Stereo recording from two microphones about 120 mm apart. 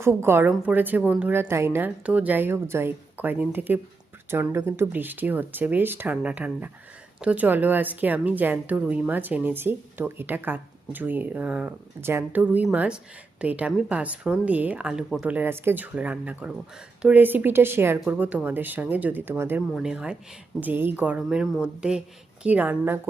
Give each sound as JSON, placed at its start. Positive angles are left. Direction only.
{"t": 0.0, "sound": "a woman's voice", "side_deg": -20}
{"t": 19.7, "sound": "a woman's voice", "side_deg": -5}